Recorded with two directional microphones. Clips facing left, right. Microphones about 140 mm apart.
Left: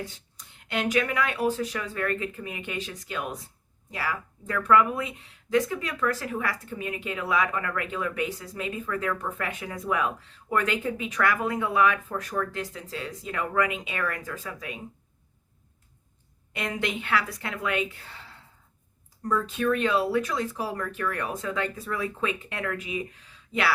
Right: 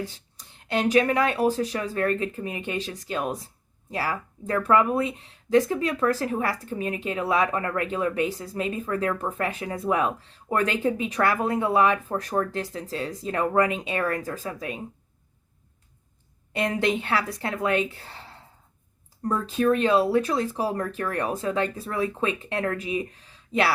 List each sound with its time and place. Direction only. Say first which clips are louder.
0.3 s speech: right 4 dB; 35° right (ahead or behind)
16.5 s speech: right 6 dB; 35° right (ahead or behind)